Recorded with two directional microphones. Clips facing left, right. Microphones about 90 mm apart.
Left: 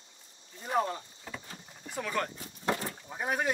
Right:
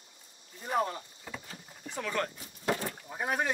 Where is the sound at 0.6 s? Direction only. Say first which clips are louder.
Left 1 dB; 5° right (ahead or behind).